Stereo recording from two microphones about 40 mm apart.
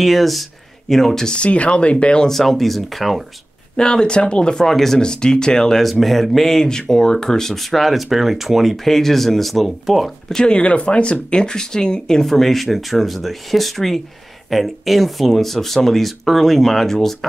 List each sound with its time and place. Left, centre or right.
0.0 s speech: centre
1.3 s speech: left
2.2 s speech: centre
3.7 s speech: left
4.6 s speech: centre
5.0 s speech: centre
5.9 s speech: centre
8.8 s speech: centre
10.3 s speech: left
12.2 s speech: centre